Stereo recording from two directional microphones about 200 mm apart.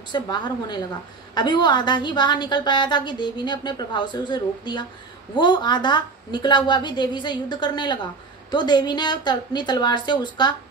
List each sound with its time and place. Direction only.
0.1 s a woman's voice: 20° left (ahead or behind)